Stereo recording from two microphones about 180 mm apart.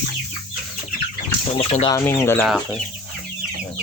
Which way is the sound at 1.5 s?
35° left (ahead or behind).